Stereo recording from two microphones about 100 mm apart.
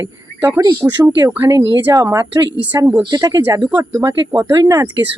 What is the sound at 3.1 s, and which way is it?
Speech, 40° right (ahead or behind).